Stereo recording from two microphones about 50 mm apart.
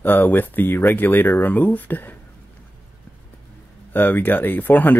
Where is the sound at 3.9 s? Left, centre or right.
Left.